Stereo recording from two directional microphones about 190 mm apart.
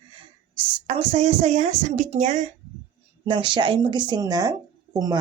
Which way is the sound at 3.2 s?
25° right (ahead or behind).